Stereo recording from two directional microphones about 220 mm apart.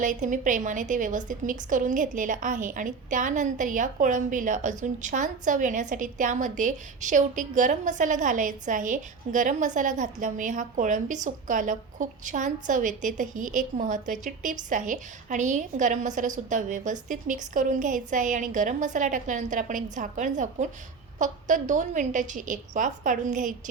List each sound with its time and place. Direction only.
0.0 s a woman's voice: 35° right (ahead or behind)